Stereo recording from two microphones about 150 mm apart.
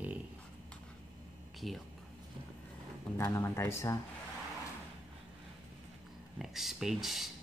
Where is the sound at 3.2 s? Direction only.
20° left (ahead or behind).